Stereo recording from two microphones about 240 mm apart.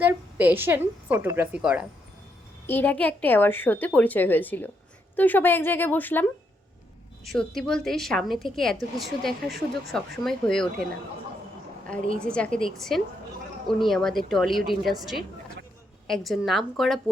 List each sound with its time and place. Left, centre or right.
0.0 s a woman's voice: centre
2.6 s a woman's voice: centre
7.3 s a woman's voice: centre
12.2 s a woman's voice: centre